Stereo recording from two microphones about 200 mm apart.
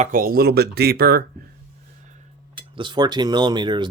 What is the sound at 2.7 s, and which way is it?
Speech, 25° right (ahead or behind).